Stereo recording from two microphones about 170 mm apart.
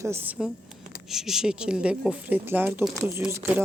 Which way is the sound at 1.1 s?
5° right (ahead or behind).